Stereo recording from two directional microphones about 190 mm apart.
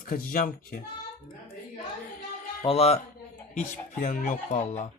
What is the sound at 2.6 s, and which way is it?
Speech, 30° left (ahead or behind).